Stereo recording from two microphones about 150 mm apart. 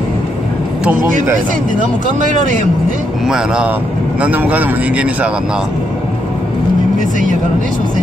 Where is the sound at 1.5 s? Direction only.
60° right (ahead or behind).